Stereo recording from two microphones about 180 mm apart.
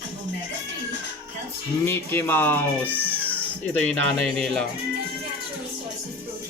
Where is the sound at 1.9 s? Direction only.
15° left (ahead or behind).